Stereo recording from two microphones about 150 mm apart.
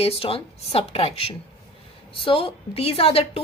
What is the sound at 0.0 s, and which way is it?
A woman's voice, 40° left (ahead or behind).